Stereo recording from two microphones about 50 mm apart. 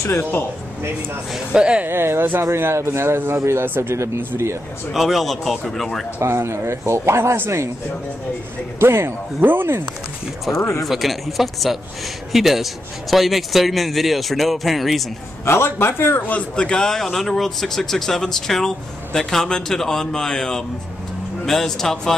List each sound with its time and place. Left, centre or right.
0.2 s speech: left
1.5 s speech: centre
1.9 s speech: right
2.6 s speech: right
3.9 s speech: right
4.9 s speech: centre
6.2 s speech: right
8.7 s speech: right
10.8 s speech: centre
15.4 s a man's voice: left
16.3 s a man's voice: left; by 22.1 s centre